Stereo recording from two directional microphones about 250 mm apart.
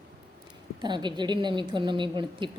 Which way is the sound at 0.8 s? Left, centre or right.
Centre.